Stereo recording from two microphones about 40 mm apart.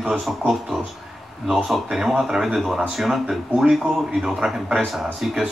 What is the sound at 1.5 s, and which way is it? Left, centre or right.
A man's voice, centre.